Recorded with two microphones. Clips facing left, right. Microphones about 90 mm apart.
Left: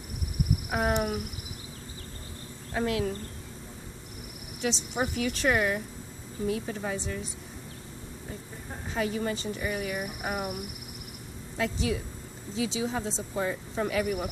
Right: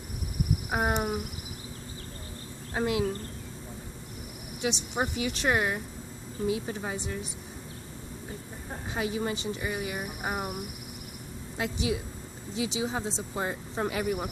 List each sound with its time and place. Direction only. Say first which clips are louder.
0.7 s speech: even; 20° right (ahead or behind)
2.7 s speech: right 1 dB; 15° right (ahead or behind)
4.6 s speech: even; 15° right (ahead or behind)
8.8 s speech: left 1 dB; 15° right (ahead or behind)
11.5 s a woman's voice: left 1 dB; 15° right (ahead or behind)